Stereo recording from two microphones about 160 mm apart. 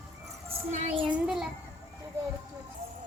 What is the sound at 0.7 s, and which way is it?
Music, 50° right (ahead or behind).